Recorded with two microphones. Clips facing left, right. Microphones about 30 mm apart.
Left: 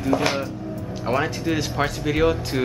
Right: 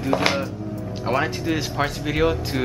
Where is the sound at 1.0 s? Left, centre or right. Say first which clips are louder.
Even; centre.